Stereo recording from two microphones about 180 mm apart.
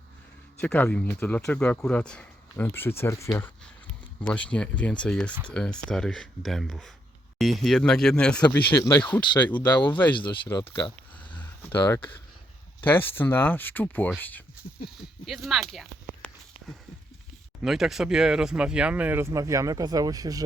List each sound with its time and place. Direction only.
0.6 s speech: 5° left (ahead or behind)
9.8 s speech: 25° left (ahead or behind)
11.2 s a sound: 10° left (ahead or behind)
12.8 s speech: 10° left (ahead or behind)
15.3 s speech: centre (ahead or behind)
15.7 s a sound: centre (ahead or behind)
17.6 s speech: centre (ahead or behind); by 20.4 s 20° right (ahead or behind)